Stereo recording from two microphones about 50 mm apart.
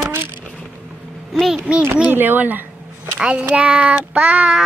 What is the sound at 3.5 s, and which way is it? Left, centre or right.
Child singing, right.